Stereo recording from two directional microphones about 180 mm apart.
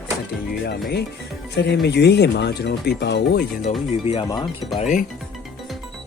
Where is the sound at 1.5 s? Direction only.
70° left (ahead or behind).